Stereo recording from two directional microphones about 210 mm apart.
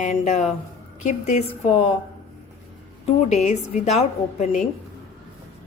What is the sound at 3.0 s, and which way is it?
A woman's voice, 30° left (ahead or behind).